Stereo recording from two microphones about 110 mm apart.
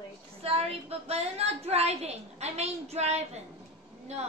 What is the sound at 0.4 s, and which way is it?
A woman's voice, 65° right (ahead or behind).